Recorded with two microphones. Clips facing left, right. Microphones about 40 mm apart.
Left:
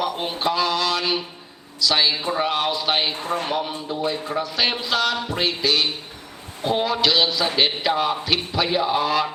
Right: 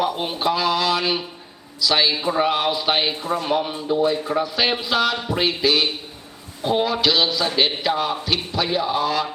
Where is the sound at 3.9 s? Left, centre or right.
Centre.